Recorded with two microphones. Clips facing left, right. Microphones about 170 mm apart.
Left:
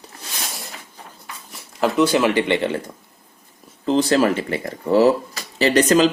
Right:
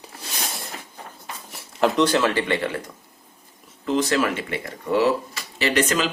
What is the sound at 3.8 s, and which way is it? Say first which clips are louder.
Speech: left 5 dB; 30° left (ahead or behind).